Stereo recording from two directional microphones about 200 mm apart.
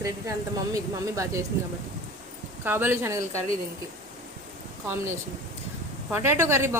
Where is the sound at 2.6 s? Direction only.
10° right (ahead or behind).